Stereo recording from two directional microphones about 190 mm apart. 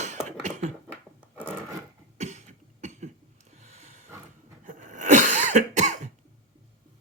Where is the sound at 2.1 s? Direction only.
40° right (ahead or behind).